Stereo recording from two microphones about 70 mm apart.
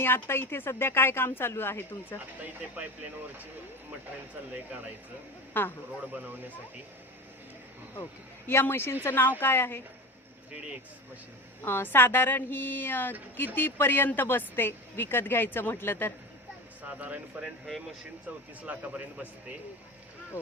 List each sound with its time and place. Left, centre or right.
0.0 s a woman's voice: left
2.4 s speech: right
5.5 s a woman's voice: left
6.1 s speech: right
8.4 s a woman's voice: left
11.6 s a woman's voice: left
16.9 s speech: right
17.7 s speech: centre
18.6 s speech: centre